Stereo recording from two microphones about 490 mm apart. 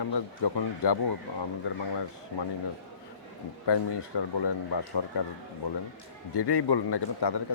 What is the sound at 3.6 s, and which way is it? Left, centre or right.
Speech, left.